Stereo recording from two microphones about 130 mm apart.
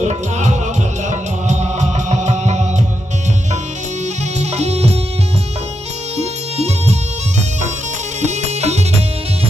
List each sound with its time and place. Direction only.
0.0 s music: 65° right (ahead or behind)
4.0 s music: 55° right (ahead or behind)
6.1 s music: 55° right (ahead or behind)
8.2 s music: 60° right (ahead or behind)